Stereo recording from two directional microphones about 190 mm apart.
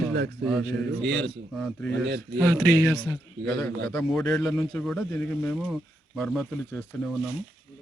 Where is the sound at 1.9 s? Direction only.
60° right (ahead or behind).